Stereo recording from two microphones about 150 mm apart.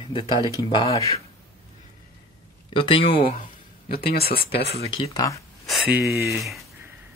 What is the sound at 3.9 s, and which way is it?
Speech, 90° left.